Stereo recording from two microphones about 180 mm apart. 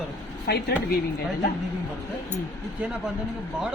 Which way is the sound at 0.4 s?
60° left (ahead or behind).